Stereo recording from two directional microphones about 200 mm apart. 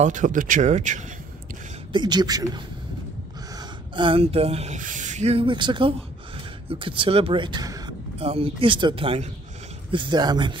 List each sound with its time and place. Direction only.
0.0 s speech: 40° right (ahead or behind)
1.9 s speech: 20° right (ahead or behind)